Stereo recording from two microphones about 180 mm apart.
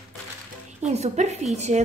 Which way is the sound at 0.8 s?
40° right (ahead or behind).